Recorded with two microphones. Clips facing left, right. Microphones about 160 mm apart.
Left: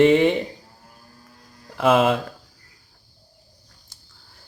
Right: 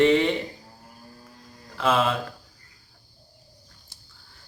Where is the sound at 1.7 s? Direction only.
55° left (ahead or behind).